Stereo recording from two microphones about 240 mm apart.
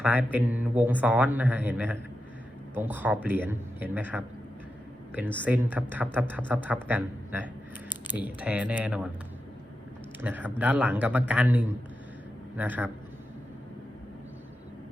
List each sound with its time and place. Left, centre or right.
0.0 s speech: centre
7.9 s typing: centre
8.2 s speech: centre
10.2 s speech: centre